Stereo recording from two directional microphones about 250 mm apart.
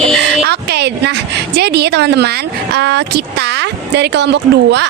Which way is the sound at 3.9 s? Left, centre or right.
Right.